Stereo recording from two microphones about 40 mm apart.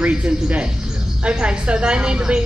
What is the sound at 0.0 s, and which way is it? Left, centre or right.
A woman's voice, right.